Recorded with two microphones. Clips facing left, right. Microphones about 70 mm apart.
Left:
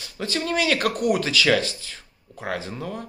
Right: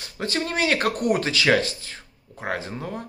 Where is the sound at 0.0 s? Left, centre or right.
Right.